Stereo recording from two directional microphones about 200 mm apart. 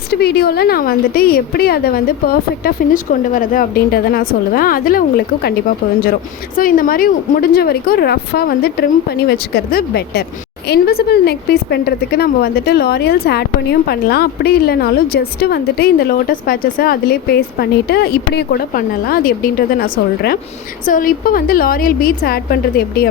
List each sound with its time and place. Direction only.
0.1 s a woman's voice: 55° left (ahead or behind)